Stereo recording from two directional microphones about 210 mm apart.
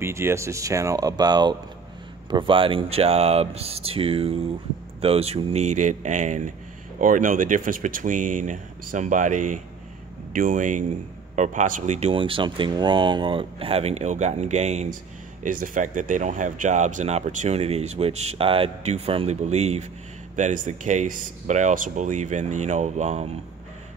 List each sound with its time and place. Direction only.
0.0 s speech: 10° right (ahead or behind); by 23.3 s 35° right (ahead or behind)